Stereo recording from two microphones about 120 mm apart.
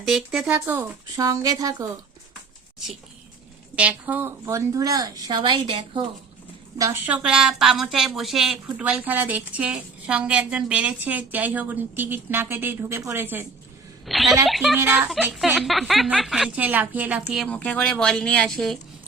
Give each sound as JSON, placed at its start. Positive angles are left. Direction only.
{"t": 0.0, "sound": "speech", "side_deg": -5}
{"t": 3.8, "sound": "a woman's voice", "side_deg": -10}
{"t": 4.4, "sound": "a woman's voice", "side_deg": -25}
{"t": 6.7, "sound": "speech", "side_deg": -25}
{"t": 7.0, "sound": "a woman's voice", "side_deg": -10}
{"t": 14.1, "sound": "speech", "side_deg": 0}
{"t": 14.8, "sound": "a woman's voice", "side_deg": -15}
{"t": 15.5, "sound": "speech", "side_deg": 0}
{"t": 16.6, "sound": "a woman's voice", "side_deg": -15}
{"t": 17.2, "sound": "speech", "side_deg": 0}
{"t": 17.5, "sound": "speech", "side_deg": 10}